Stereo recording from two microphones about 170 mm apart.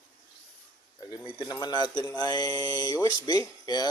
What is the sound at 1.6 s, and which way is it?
Speech, 25° left (ahead or behind).